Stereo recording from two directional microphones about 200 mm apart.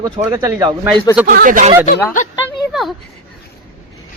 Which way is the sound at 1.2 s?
45° right (ahead or behind).